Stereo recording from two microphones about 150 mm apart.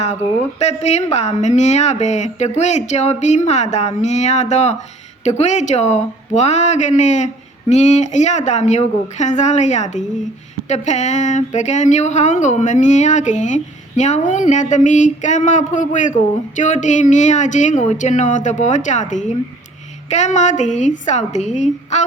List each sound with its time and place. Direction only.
0.6 s speech: 45° left (ahead or behind)